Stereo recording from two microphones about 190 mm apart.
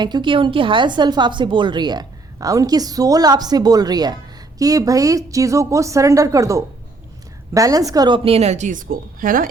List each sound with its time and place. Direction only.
0.0 s a woman's voice: 25° right (ahead or behind); by 9.5 s 45° right (ahead or behind)